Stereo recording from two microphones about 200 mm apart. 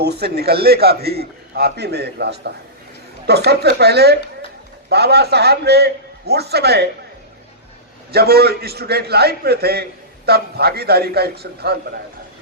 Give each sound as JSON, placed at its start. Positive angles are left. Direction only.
{"t": 0.0, "sound": "a man's voice", "side_deg": -55}
{"t": 8.1, "sound": "a man's voice", "side_deg": -50}